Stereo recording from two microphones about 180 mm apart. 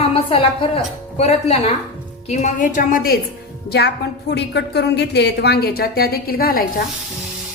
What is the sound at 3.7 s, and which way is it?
A woman's voice, 65° left (ahead or behind).